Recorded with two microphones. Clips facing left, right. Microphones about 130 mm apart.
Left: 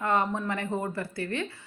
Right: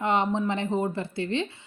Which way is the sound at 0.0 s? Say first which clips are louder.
Right 2 dB; 20° right (ahead or behind).